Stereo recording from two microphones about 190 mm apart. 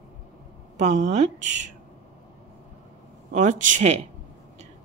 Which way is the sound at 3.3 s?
40° right (ahead or behind).